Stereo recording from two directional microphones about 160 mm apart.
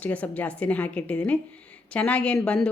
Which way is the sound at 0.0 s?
10° left (ahead or behind).